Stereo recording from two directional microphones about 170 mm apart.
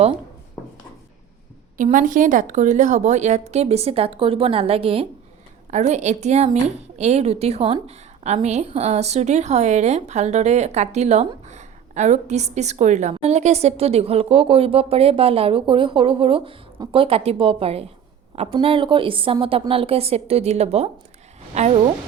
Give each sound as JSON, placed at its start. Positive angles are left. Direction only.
{"t": 1.8, "sound": "a woman's voice", "side_deg": -50}